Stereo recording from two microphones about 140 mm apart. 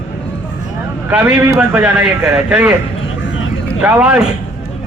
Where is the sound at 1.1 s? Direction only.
10° right (ahead or behind).